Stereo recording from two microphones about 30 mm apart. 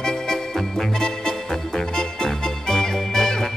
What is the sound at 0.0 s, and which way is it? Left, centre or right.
Music, centre.